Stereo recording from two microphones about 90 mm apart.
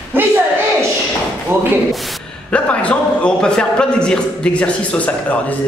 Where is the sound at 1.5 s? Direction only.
30° right (ahead or behind).